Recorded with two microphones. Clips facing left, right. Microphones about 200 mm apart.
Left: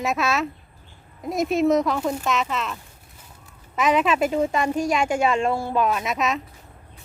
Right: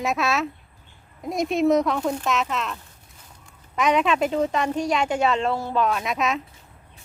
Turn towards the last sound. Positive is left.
turn(degrees=0)  # may be behind; listen again after turning